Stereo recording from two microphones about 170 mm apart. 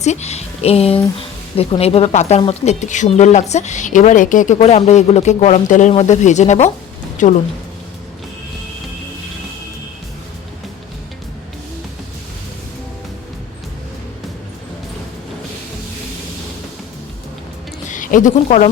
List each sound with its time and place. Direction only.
0.0 s speech: 40° left (ahead or behind)
17.8 s a woman's voice: 50° left (ahead or behind)